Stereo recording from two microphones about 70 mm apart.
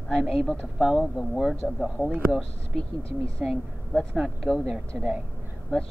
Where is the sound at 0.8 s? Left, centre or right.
Centre.